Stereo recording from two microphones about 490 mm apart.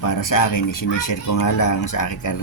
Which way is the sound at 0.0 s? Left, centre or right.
Left.